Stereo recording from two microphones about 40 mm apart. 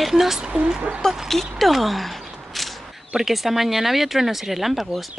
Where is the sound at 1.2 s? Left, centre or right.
Centre.